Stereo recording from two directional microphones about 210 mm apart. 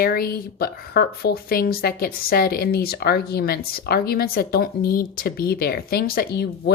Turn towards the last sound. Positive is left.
turn(degrees=50)  # may be behind; listen again after turning